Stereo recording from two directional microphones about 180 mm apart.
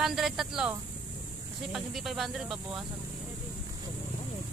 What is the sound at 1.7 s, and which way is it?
Speech, centre (ahead or behind).